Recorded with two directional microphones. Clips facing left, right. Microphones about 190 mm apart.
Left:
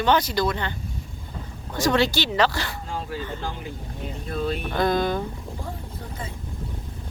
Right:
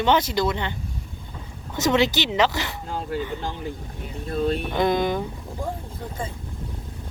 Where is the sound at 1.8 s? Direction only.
20° right (ahead or behind).